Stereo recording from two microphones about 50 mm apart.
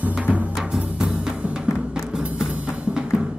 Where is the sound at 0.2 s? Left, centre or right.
Right.